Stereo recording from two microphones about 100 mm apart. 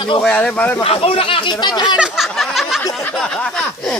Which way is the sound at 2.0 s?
Centre (ahead or behind).